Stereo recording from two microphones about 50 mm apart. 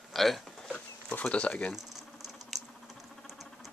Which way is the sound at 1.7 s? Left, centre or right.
Centre.